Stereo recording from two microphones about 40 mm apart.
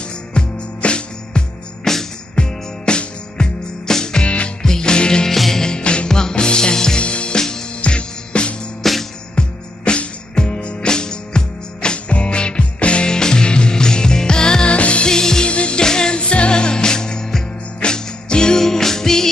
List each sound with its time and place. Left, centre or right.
0.3 s music: left
1.9 s music: centre
2.3 s music: left
5.3 s music: centre
7.0 s music: left
7.3 s music: centre
7.8 s music: left
8.8 s music: centre
9.3 s music: left
15.0 s music: centre
15.4 s music: left
15.8 s music: centre
16.2 s music: left; by 19.2 s centre